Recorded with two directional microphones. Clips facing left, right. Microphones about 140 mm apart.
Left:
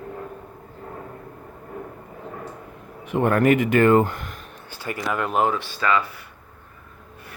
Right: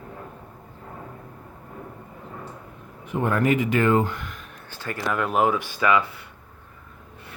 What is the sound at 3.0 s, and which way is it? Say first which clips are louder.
Speech: left 4 dB; 70° left (ahead or behind).